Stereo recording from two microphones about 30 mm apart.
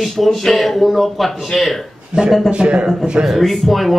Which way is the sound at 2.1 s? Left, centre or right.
Right.